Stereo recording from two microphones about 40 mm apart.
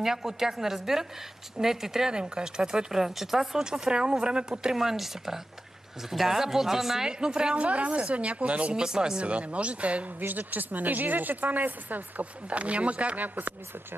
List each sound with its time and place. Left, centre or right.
0.0 s speech: centre
2.1 s speech: right
3.7 s speech: centre
7.1 s speech: right
7.5 s a woman's voice: right
8.7 s speech: centre
9.2 s a woman's voice: right
10.2 s speech: right
12.4 s a woman's voice: right
13.2 s speech: right